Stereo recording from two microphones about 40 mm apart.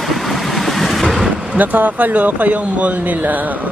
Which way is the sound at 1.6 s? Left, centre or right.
Right.